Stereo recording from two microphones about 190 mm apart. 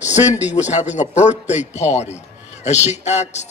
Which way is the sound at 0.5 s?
35° left (ahead or behind).